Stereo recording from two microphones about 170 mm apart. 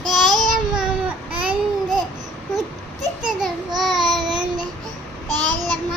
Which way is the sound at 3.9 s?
Centre (ahead or behind).